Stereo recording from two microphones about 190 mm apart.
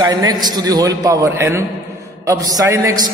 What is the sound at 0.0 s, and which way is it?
A man's voice, 20° right (ahead or behind).